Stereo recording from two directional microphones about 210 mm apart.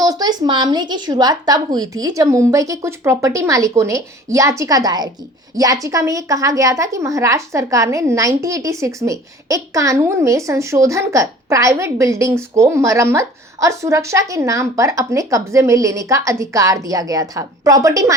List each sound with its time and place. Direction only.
0.0 s a woman's voice: 15° right (ahead or behind)